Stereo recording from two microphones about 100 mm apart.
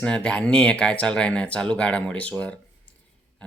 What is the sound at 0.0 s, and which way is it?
Speech, 10° left (ahead or behind).